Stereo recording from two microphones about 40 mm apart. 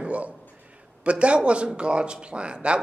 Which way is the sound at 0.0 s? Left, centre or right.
Right.